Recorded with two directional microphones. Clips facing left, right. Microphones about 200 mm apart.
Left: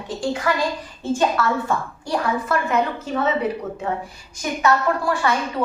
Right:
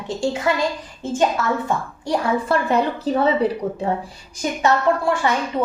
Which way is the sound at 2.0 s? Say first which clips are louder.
Right 3 dB; 30° right (ahead or behind).